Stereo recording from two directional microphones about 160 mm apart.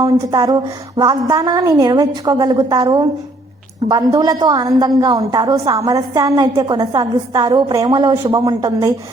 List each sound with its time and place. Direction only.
0.0 s a woman's voice: 25° right (ahead or behind)